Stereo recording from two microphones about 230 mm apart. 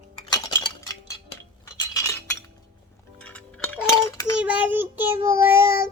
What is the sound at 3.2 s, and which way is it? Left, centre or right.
Music, centre.